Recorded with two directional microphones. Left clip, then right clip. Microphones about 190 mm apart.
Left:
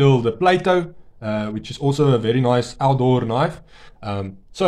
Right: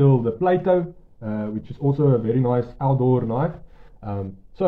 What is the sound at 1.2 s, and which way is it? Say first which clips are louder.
A man's voice: left 5 dB; 40° left (ahead or behind).